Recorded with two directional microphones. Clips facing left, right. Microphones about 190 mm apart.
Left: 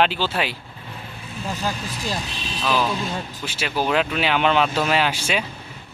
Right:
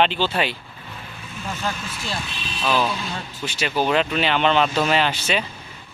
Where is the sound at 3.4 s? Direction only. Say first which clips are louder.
Right 2 dB; 5° left (ahead or behind).